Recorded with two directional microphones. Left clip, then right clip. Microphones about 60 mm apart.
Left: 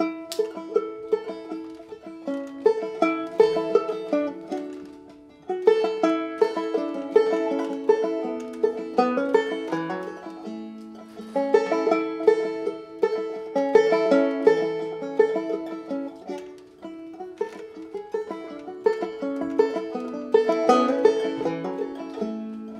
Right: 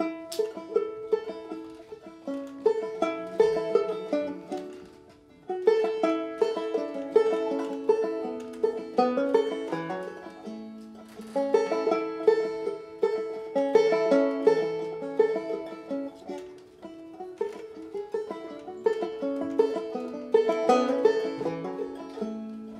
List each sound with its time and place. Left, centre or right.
0.0 s music: centre
2.2 s music: left
17.4 s music: centre